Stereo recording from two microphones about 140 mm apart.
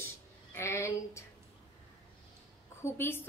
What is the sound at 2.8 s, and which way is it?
Speech, 15° left (ahead or behind).